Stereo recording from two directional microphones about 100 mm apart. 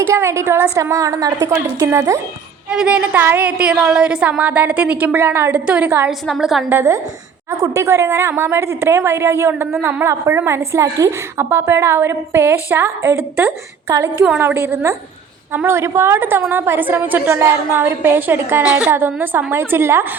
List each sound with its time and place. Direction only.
0.1 s a woman's voice: 25° right (ahead or behind)
2.6 s a woman's voice: 10° right (ahead or behind)
3.2 s a woman's voice: 25° right (ahead or behind)
3.4 s a woman's voice: 10° right (ahead or behind)
6.1 s a woman's voice: centre (ahead or behind)
6.7 s a woman's voice: 25° right (ahead or behind)
7.5 s a woman's voice: 35° right (ahead or behind)
18.6 s a woman's voice: 10° right (ahead or behind)
18.9 s a woman's voice: 20° right (ahead or behind)